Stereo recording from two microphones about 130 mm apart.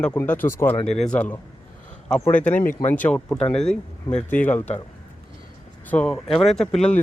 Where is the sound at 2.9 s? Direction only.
10° left (ahead or behind).